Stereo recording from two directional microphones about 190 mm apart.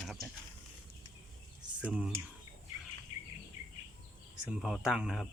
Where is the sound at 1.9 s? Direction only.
5° right (ahead or behind).